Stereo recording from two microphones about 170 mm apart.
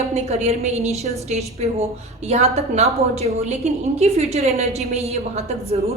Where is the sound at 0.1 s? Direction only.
40° right (ahead or behind).